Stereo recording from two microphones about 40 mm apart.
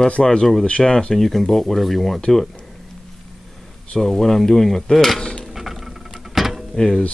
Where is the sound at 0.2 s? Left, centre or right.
Centre.